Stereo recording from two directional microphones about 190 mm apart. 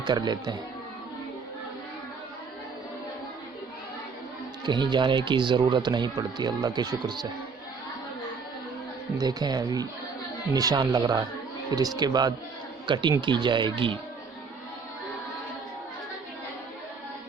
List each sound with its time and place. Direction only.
0.0 s speech: 20° right (ahead or behind)
4.6 s speech: 25° right (ahead or behind)
9.1 s speech: 20° right (ahead or behind)